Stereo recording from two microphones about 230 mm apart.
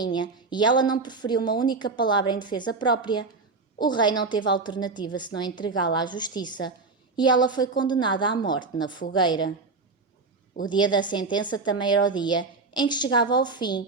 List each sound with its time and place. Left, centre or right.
0.0 s a woman's voice: centre
10.6 s a woman's voice: centre